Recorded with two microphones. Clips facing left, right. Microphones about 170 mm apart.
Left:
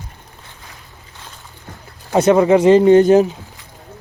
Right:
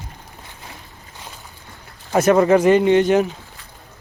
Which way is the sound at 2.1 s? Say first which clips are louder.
Left 2 dB; 15° left (ahead or behind).